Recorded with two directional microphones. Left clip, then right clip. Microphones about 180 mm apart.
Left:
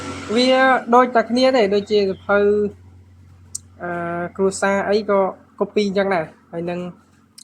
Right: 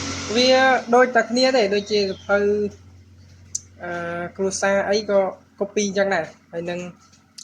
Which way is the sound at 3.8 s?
45° left (ahead or behind).